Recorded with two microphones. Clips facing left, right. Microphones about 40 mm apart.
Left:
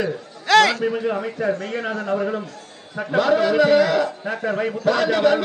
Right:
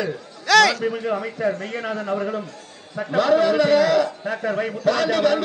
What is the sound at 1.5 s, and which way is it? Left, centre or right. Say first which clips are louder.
Speech: left 3 dB; left.